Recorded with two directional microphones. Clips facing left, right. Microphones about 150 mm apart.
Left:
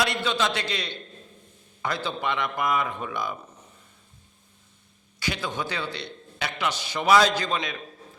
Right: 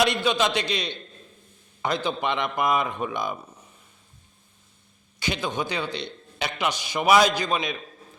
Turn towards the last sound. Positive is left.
turn(degrees=-15)  # may be behind; listen again after turning